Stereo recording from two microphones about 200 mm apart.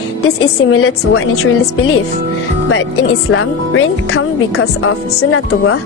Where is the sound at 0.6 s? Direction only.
90° left.